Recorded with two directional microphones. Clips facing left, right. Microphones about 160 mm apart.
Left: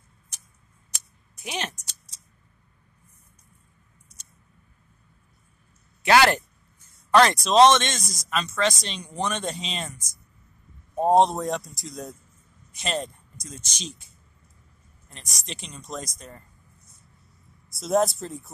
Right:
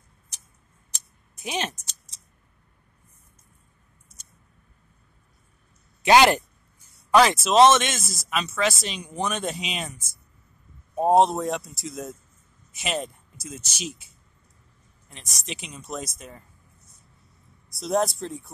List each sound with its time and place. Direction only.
1.3 s speech: 20° right (ahead or behind)
6.0 s speech: 20° right (ahead or behind)
7.1 s speech: 5° right (ahead or behind)
15.0 s speech: centre (ahead or behind)
17.6 s speech: centre (ahead or behind)